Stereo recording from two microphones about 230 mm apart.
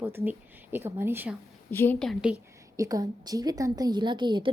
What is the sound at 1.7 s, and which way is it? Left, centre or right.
A woman's voice, centre.